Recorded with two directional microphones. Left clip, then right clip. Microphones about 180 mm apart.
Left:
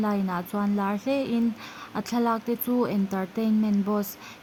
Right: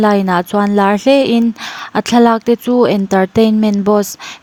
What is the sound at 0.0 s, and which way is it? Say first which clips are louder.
Speech: right 17 dB; 55° right (ahead or behind).